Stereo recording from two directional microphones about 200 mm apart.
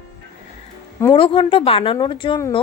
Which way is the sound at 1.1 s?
25° left (ahead or behind).